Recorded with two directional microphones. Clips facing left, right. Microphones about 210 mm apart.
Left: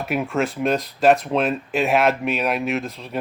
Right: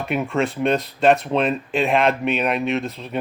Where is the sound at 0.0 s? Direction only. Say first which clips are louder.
Right 1 dB; 5° left (ahead or behind).